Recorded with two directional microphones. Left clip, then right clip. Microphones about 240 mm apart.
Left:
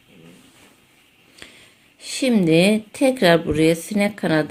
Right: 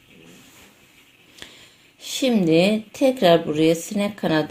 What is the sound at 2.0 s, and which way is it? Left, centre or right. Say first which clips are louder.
Speech: left 1 dB; centre.